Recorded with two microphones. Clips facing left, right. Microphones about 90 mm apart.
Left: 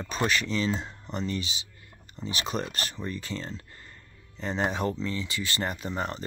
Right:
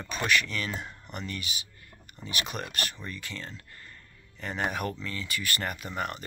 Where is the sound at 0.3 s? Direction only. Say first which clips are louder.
Left 1 dB; 30° left (ahead or behind).